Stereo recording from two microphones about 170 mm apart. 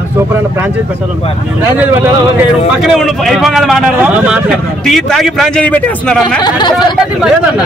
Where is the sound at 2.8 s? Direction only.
Centre (ahead or behind).